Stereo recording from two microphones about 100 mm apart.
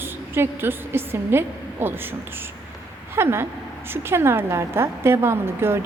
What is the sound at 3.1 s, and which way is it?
A woman's voice, 25° right (ahead or behind).